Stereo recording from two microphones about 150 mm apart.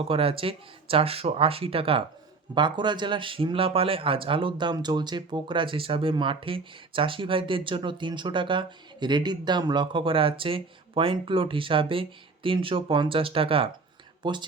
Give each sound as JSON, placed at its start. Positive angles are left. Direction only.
{"t": 0.0, "sound": "speech", "side_deg": -40}